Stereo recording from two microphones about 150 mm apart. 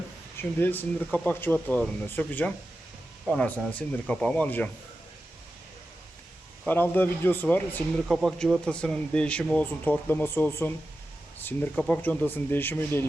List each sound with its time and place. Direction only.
0.3 s speech: 10° left (ahead or behind)
6.7 s speech: 15° left (ahead or behind)
8.0 s speech: centre (ahead or behind)